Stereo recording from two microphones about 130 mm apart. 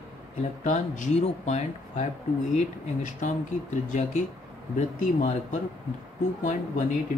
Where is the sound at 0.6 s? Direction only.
70° left (ahead or behind).